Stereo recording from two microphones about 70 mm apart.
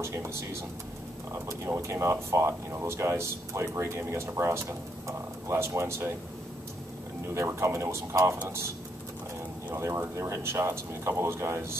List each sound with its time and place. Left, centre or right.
0.0 s speech: right
7.3 s speech: right
9.8 s speech: right